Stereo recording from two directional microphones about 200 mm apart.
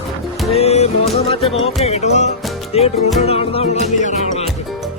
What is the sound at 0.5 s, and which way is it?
Music, 30° left (ahead or behind).